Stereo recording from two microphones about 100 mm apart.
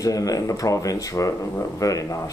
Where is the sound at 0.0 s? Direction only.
35° left (ahead or behind).